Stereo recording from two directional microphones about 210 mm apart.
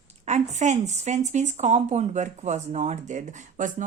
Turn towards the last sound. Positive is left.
turn(degrees=-35)  # may be behind; listen again after turning